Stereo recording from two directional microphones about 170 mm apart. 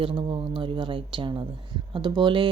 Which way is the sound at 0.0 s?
30° right (ahead or behind).